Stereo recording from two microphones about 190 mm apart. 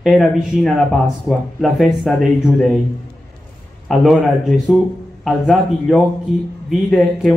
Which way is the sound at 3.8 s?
Centre (ahead or behind).